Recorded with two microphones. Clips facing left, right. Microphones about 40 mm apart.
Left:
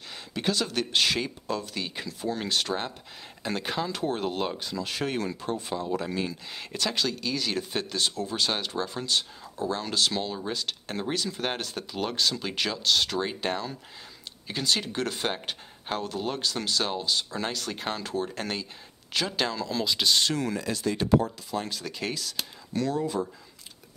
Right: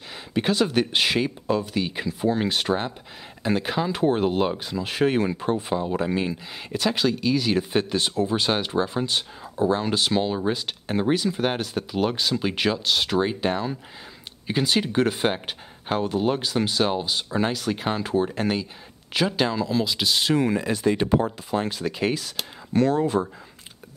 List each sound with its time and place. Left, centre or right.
0.3 s speech: right
3.9 s speech: right
6.5 s speech: centre
20.3 s speech: right
22.7 s speech: right